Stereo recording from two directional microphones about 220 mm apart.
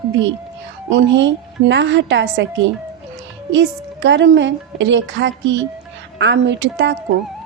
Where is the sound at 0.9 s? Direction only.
55° right (ahead or behind).